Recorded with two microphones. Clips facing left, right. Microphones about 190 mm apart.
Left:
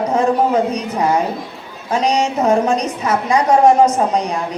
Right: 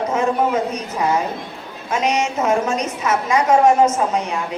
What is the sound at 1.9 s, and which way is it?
A woman's voice, 35° left (ahead or behind).